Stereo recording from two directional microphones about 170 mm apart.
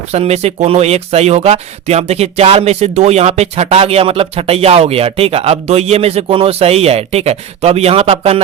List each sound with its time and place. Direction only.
0.1 s speech: 40° right (ahead or behind)